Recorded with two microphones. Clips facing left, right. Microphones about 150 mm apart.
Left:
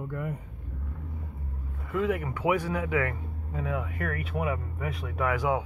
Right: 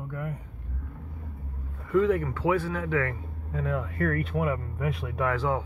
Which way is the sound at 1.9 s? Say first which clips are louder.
Right 5 dB; 10° left (ahead or behind).